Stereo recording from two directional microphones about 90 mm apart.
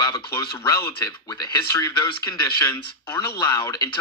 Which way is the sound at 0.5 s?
50° left (ahead or behind).